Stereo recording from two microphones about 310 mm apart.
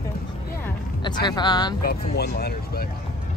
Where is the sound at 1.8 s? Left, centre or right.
Left.